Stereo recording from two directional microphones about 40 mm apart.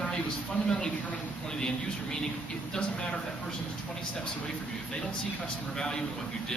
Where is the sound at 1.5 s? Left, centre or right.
Centre.